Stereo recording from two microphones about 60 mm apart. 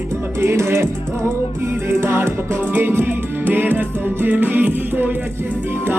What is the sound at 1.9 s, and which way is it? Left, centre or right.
Music, right.